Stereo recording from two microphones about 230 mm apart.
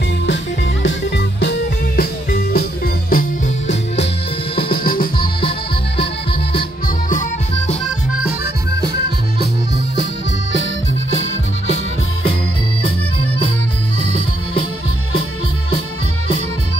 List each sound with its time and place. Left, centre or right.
0.8 s music: left
7.1 s music: left